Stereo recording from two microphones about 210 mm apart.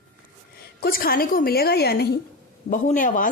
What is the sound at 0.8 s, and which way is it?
A woman's voice, 45° left (ahead or behind).